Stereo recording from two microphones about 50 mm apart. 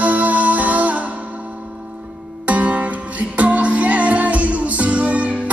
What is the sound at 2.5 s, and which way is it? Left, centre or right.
Music, right.